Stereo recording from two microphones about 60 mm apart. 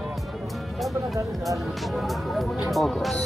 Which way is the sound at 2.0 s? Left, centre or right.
Centre.